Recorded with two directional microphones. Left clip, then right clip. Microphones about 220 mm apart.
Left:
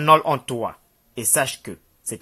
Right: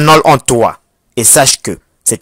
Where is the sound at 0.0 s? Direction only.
40° right (ahead or behind).